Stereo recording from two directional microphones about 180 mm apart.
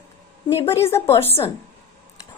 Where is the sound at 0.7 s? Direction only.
15° left (ahead or behind).